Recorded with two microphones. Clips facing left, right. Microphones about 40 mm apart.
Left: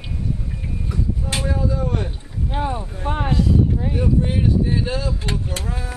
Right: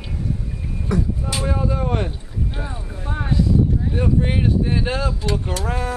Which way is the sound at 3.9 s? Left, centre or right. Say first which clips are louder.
Even; right.